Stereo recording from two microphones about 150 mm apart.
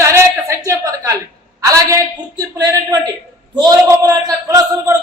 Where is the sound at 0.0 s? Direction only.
20° right (ahead or behind).